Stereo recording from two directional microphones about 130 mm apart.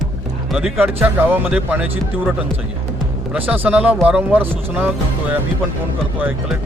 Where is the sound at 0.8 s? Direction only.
15° right (ahead or behind).